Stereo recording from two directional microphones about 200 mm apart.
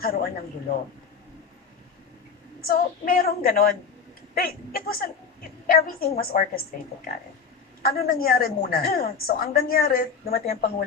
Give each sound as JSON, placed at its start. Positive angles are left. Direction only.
{"t": 0.0, "sound": "a woman's voice", "side_deg": 50}
{"t": 2.6, "sound": "a woman's voice", "side_deg": 50}
{"t": 7.8, "sound": "a woman's voice", "side_deg": 50}